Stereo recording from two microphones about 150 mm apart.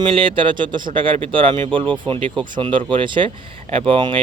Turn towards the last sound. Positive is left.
turn(degrees=-35)  # may be behind; listen again after turning